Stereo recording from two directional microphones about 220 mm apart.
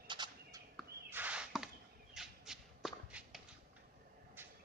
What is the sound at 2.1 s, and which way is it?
Squawk, centre (ahead or behind).